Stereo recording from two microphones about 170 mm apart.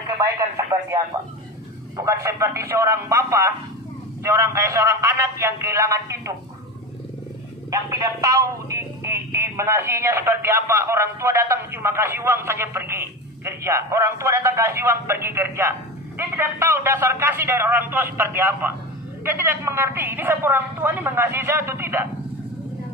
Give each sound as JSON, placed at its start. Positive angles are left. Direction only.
{"t": 0.0, "sound": "speech", "side_deg": -20}
{"t": 7.7, "sound": "speech", "side_deg": -20}